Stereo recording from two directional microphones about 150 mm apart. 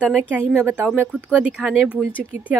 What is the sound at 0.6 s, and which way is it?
Speech, 15° right (ahead or behind).